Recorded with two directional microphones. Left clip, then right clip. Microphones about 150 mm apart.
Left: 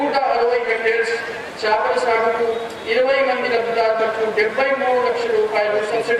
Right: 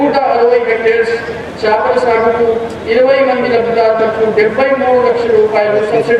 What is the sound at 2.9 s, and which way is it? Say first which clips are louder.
A man's voice: right 7 dB; 15° right (ahead or behind).